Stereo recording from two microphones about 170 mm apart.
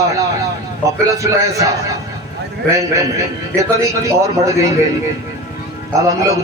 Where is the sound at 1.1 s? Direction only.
20° right (ahead or behind).